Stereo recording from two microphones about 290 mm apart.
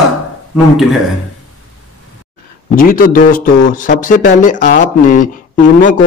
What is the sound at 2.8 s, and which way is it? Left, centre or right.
A man's voice, left.